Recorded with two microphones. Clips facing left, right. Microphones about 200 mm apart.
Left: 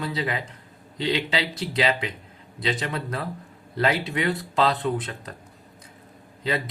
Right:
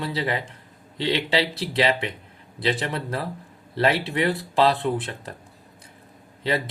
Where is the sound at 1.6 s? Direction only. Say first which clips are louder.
Right 2 dB; 30° right (ahead or behind).